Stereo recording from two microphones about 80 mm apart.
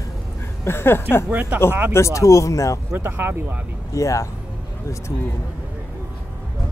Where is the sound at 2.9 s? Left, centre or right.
Right.